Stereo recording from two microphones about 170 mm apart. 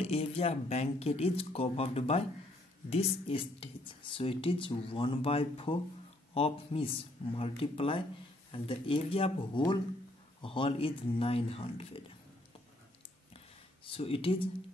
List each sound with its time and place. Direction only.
0.0 s speech: 35° left (ahead or behind)
10.4 s speech: 30° left (ahead or behind)
13.8 s speech: 35° left (ahead or behind)